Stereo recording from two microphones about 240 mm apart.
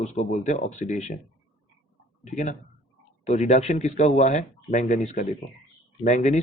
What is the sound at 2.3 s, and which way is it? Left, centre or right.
Speech, left.